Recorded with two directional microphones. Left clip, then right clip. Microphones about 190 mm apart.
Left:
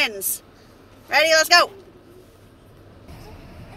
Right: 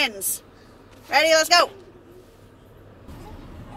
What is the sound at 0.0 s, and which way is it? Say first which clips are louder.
A man's voice: left 1 dB; 15° left (ahead or behind).